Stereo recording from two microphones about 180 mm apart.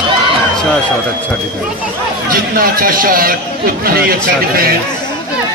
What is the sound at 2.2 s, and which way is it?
A man's voice, 55° right (ahead or behind).